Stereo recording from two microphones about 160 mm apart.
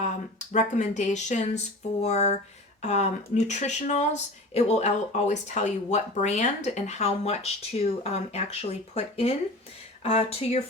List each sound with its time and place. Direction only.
0.0 s speech: 45° left (ahead or behind)